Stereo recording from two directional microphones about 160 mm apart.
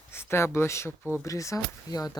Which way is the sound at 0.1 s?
15° left (ahead or behind).